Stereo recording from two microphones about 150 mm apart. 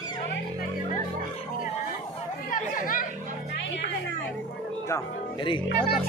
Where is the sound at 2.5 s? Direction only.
65° left (ahead or behind).